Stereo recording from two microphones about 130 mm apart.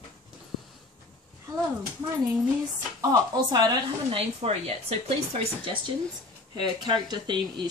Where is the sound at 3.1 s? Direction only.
30° right (ahead or behind).